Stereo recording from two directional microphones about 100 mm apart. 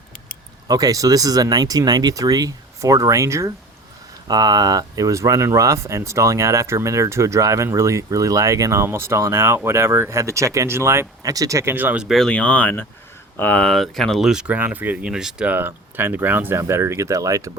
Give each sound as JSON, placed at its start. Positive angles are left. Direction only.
{"t": 0.7, "sound": "speech", "side_deg": -40}
{"t": 11.7, "sound": "speech", "side_deg": -15}
{"t": 12.0, "sound": "speech", "side_deg": 0}
{"t": 12.3, "sound": "speech", "side_deg": 15}
{"t": 15.5, "sound": "speech", "side_deg": -20}